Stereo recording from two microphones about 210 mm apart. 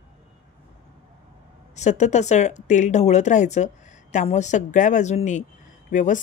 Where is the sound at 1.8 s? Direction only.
35° left (ahead or behind).